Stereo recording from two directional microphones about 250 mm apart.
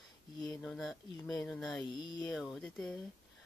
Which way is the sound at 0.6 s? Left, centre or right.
Centre.